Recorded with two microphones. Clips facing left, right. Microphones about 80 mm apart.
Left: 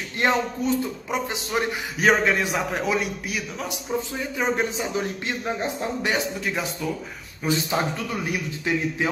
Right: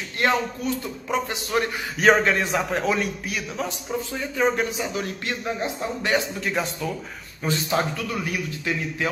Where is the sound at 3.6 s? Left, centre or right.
Centre.